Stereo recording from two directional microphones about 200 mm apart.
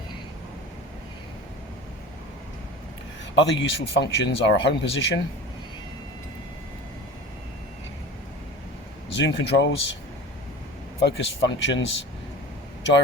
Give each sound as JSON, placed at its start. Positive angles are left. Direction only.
{"t": 3.3, "sound": "speech", "side_deg": 65}
{"t": 9.0, "sound": "speech", "side_deg": 60}
{"t": 11.0, "sound": "speech", "side_deg": 60}